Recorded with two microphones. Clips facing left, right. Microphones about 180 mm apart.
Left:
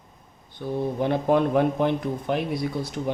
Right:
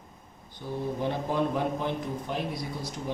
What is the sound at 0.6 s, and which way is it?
Speech, 70° left (ahead or behind).